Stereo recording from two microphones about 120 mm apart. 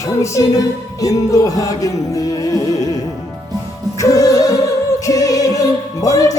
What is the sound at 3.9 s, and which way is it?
Music, 30° left (ahead or behind).